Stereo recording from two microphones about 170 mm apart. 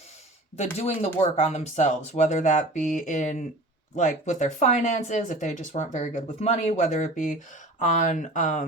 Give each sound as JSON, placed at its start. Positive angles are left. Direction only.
{"t": 0.5, "sound": "speech", "side_deg": 40}